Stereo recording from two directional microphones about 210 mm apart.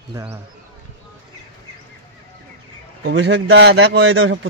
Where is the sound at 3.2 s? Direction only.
60° right (ahead or behind); by 4.4 s 80° right.